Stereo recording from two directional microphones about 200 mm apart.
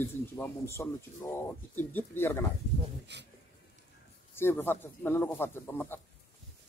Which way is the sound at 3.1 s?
60° right (ahead or behind).